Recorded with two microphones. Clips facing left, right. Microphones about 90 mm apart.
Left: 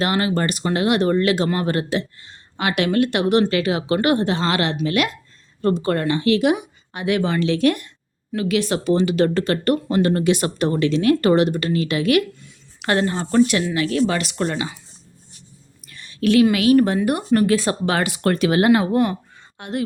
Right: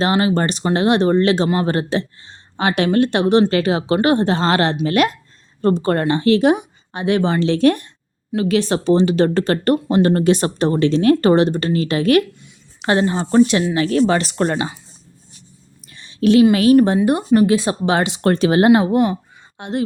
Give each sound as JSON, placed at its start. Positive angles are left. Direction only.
{"t": 0.0, "sound": "speech", "side_deg": -25}
{"t": 12.4, "sound": "speech", "side_deg": -20}
{"t": 15.9, "sound": "a sound", "side_deg": -20}
{"t": 16.7, "sound": "speech", "side_deg": -25}